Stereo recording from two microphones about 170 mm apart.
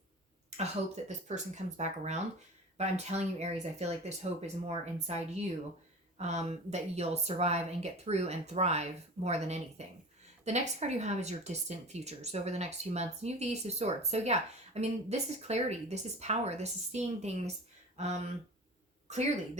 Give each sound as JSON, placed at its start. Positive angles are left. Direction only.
{"t": 0.5, "sound": "speech", "side_deg": -40}